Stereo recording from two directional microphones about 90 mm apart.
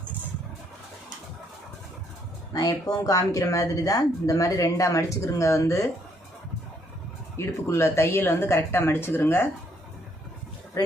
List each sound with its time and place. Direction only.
2.5 s speech: 40° left (ahead or behind)
7.3 s speech: 30° left (ahead or behind)